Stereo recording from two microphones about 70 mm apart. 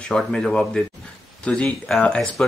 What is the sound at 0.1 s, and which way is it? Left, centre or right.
A man's voice, centre.